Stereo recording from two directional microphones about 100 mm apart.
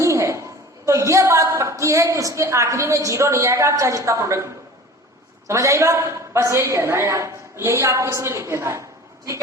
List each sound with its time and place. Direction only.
0.0 s a woman's voice: 30° right (ahead or behind)